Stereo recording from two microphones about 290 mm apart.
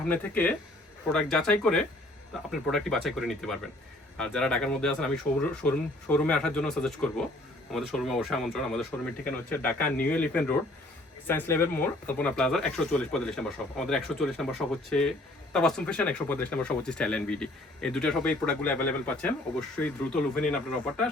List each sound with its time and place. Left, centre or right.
0.1 s speech: centre